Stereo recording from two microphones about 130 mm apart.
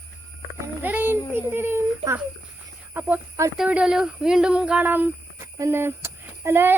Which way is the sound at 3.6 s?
10° right (ahead or behind).